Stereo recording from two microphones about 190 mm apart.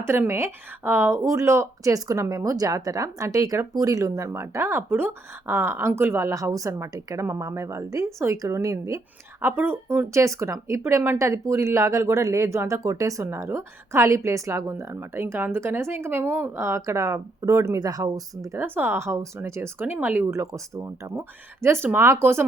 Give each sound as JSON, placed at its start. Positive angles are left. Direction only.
{"t": 0.0, "sound": "speech", "side_deg": -15}